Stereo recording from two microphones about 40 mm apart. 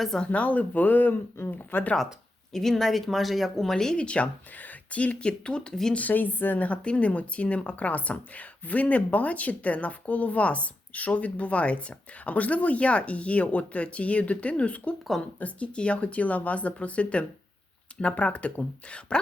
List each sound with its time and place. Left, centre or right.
0.3 s speech: left
2.5 s speech: centre
3.9 s speech: left
4.5 s speech: left
5.2 s speech: left
5.9 s speech: left
6.8 s speech: left